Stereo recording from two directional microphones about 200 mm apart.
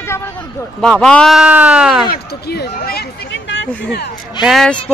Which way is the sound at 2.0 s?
55° left (ahead or behind).